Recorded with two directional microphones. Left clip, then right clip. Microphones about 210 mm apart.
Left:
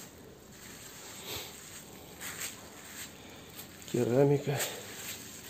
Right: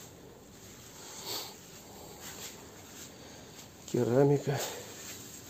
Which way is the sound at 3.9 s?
10° right (ahead or behind).